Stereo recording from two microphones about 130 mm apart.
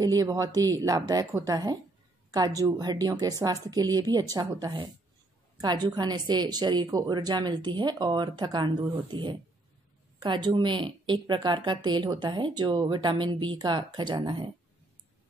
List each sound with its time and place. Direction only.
0.0 s a woman's voice: 30° right (ahead or behind)